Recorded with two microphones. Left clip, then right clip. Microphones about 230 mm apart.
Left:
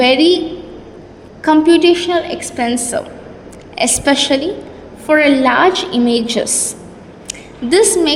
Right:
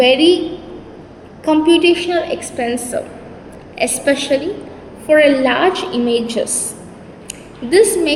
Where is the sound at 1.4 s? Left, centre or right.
Left.